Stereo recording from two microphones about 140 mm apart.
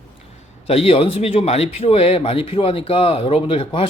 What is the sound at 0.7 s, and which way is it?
Speech, 45° left (ahead or behind).